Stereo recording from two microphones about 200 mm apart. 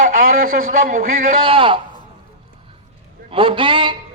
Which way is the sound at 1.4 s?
25° right (ahead or behind).